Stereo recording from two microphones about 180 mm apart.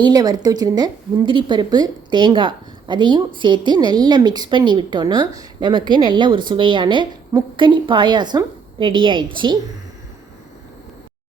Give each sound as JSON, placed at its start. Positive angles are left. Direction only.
{"t": 0.0, "sound": "a woman's voice", "side_deg": -20}